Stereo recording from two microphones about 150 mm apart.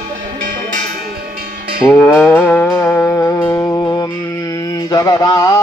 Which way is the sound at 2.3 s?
10° left (ahead or behind).